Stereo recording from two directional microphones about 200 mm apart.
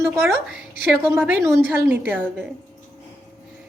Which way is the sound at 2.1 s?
5° left (ahead or behind).